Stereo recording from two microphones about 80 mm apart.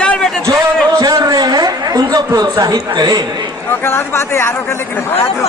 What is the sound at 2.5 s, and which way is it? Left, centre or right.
Speech, right.